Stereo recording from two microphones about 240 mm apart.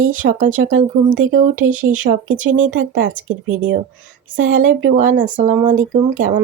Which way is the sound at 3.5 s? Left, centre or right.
Right.